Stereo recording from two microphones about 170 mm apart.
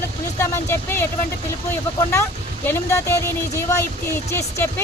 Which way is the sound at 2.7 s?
15° left (ahead or behind).